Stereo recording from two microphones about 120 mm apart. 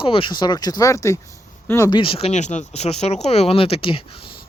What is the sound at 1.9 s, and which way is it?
Speech, 45° left (ahead or behind).